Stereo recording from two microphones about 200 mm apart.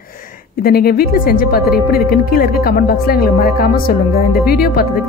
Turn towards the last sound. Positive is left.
turn(degrees=50)  # may be behind; listen again after turning